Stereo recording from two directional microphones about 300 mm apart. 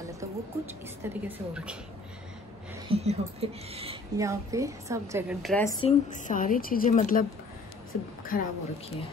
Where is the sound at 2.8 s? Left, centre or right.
Centre.